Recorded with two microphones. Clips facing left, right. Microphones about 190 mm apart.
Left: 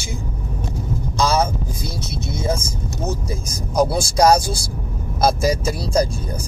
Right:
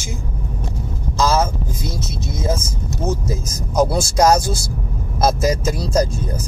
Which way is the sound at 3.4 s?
Centre (ahead or behind).